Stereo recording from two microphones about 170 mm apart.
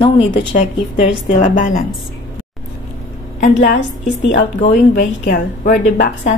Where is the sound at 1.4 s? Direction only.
50° left (ahead or behind).